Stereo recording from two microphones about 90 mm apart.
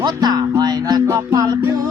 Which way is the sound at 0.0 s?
50° right (ahead or behind).